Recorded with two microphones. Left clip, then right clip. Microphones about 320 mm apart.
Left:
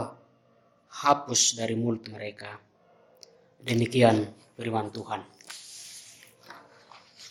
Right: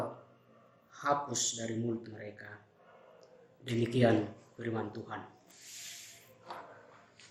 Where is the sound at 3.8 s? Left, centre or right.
Left.